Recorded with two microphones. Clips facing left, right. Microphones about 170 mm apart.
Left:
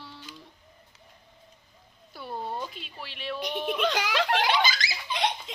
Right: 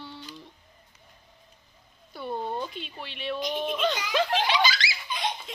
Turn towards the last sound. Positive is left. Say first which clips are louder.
# right 1 dB
turn(degrees=20)  # may be behind; listen again after turning